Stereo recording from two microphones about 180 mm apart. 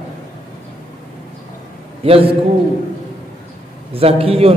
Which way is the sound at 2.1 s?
30° right (ahead or behind).